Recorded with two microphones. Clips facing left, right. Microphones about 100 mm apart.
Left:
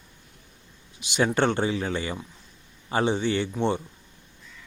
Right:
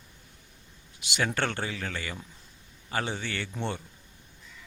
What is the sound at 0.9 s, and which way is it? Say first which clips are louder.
Speech: left 6 dB; 20° left (ahead or behind).